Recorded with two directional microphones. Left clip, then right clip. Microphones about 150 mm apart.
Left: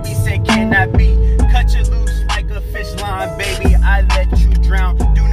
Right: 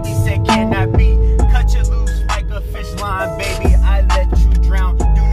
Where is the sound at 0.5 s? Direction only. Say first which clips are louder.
Left 3 dB; 20° right (ahead or behind).